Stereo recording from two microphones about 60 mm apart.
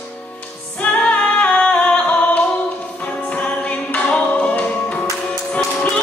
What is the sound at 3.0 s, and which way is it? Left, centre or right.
Music, left.